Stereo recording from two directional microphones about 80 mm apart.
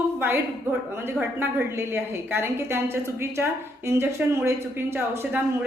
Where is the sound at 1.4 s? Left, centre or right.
Right.